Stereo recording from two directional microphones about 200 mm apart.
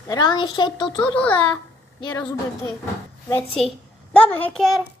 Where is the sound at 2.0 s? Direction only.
20° left (ahead or behind).